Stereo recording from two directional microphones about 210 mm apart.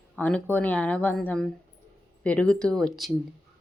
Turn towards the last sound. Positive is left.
turn(degrees=0)  # may be behind; listen again after turning